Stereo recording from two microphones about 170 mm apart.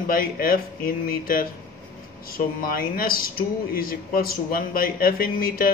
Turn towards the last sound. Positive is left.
turn(degrees=60)  # may be behind; listen again after turning